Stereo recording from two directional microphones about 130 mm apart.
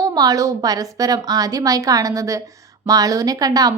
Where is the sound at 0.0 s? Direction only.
30° right (ahead or behind).